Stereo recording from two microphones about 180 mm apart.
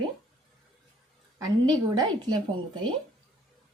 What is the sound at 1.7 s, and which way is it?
A woman's voice, 20° right (ahead or behind).